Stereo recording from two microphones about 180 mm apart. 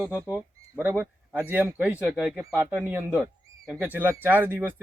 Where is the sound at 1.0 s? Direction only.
10° right (ahead or behind).